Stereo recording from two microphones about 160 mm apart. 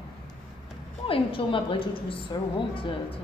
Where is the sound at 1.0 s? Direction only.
35° left (ahead or behind).